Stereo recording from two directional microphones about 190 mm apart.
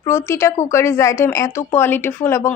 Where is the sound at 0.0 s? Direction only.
15° left (ahead or behind).